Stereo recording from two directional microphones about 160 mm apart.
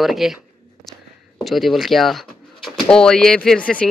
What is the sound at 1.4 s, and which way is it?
A man's voice, centre (ahead or behind).